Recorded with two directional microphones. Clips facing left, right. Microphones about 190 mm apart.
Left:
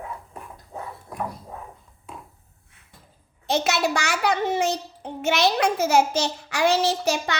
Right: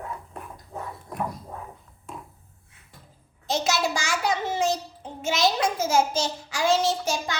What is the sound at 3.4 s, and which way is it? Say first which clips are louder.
A child's voice: left 2 dB; 60° left (ahead or behind).